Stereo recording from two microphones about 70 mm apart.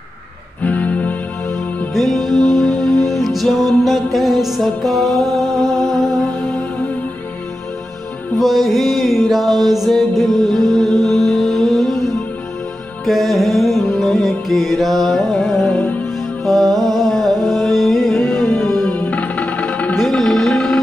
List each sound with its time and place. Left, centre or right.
0.6 s music: left
2.0 s music: centre
8.4 s music: centre
13.0 s music: centre
15.7 s music: left
16.4 s music: centre
18.5 s music: left
20.0 s music: centre